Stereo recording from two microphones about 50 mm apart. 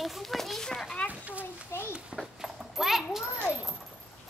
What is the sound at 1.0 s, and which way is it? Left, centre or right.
Speech, right.